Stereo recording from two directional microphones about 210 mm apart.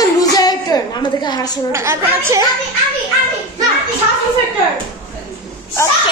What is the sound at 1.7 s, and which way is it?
Speech, 15° right (ahead or behind).